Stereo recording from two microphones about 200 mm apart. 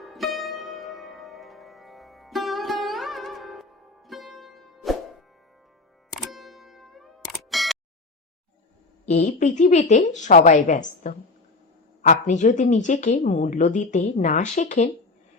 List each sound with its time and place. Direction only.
0.0 s music: centre (ahead or behind)
7.5 s a sound: centre (ahead or behind)
9.0 s a woman's voice: 35° left (ahead or behind)